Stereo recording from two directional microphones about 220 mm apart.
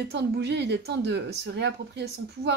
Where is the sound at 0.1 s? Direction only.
50° right (ahead or behind).